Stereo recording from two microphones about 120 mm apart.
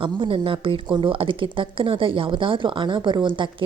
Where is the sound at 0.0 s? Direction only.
45° right (ahead or behind).